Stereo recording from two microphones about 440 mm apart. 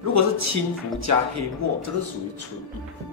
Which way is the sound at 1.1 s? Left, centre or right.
Right.